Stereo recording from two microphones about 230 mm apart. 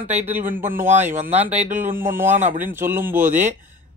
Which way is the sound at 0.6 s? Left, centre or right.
Right.